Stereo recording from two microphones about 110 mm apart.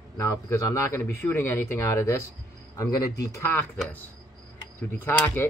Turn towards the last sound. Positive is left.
turn(degrees=15)  # may be behind; listen again after turning